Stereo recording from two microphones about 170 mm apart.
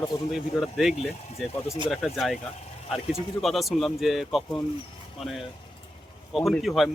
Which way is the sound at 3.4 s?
Centre (ahead or behind).